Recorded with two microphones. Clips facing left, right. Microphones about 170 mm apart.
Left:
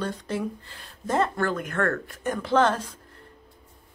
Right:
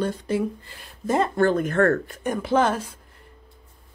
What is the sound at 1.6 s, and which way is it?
Speech, 40° right (ahead or behind).